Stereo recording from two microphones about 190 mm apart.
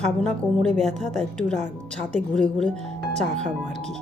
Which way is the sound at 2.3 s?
5° left (ahead or behind).